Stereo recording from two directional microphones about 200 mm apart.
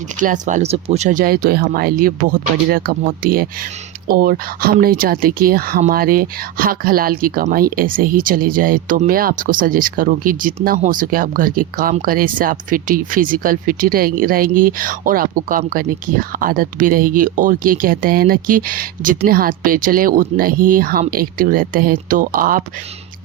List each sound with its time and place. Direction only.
0.2 s speech: 40° right (ahead or behind)